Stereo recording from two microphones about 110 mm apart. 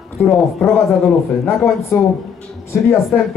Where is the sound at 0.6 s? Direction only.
Centre (ahead or behind).